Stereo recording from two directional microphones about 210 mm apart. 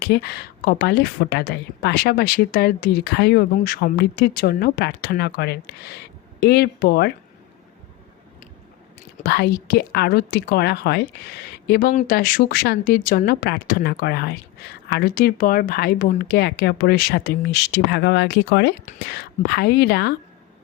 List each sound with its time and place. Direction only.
0.0 s a woman's voice: 50° left (ahead or behind)
9.1 s a woman's voice: 45° left (ahead or behind)